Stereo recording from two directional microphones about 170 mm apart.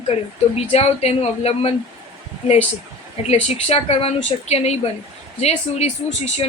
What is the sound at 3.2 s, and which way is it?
Speech, 35° left (ahead or behind).